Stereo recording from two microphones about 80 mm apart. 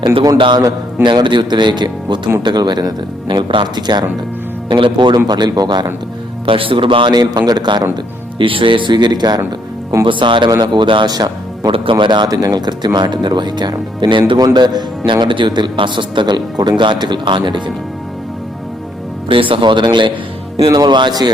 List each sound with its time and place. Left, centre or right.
0.0 s speech: right
4.7 s speech: right
6.5 s speech: right
8.4 s speech: right
10.1 s a man's voice: right
10.6 s speech: right
11.9 s speech: right
12.3 s speech: right
14.3 s speech: right
19.3 s a man's voice: right
20.7 s speech: right